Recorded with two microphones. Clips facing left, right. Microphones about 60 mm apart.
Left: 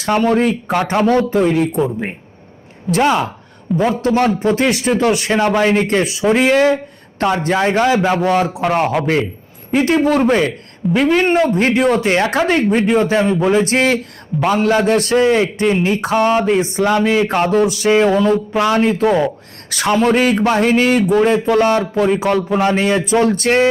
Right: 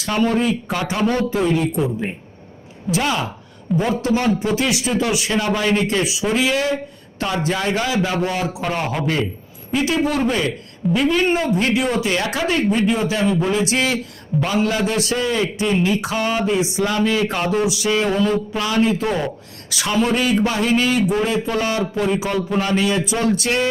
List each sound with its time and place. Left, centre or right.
0.0 s speech: left
3.7 s a man's voice: centre
4.0 s speech: left
9.7 s speech: left
16.0 s speech: left
17.0 s speech: left
17.2 s speech: left